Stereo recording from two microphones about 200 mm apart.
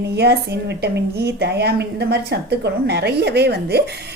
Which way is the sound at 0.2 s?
55° right (ahead or behind).